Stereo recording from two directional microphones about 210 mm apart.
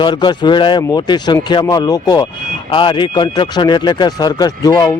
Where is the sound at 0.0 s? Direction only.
20° left (ahead or behind).